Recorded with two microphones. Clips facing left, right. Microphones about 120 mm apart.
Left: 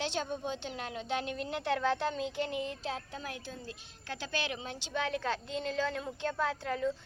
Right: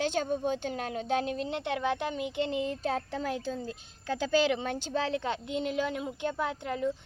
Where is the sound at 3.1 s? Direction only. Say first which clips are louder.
Right 9 dB; 90° right.